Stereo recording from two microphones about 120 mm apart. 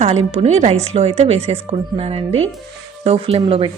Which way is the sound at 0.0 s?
60° right (ahead or behind).